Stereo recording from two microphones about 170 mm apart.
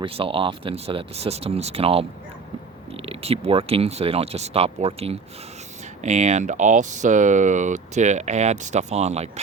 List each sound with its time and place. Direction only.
0.0 s speech: 35° right (ahead or behind)